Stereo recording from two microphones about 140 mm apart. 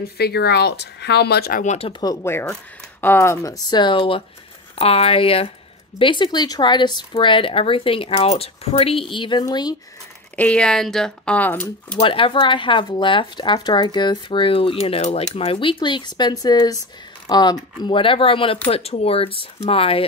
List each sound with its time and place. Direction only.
1.4 s speech: 75° left (ahead or behind)
1.9 s speech: 30° left (ahead or behind)
3.0 s speech: 15° left (ahead or behind)
10.3 s speech: 10° left (ahead or behind)
12.0 s speech: 40° left (ahead or behind)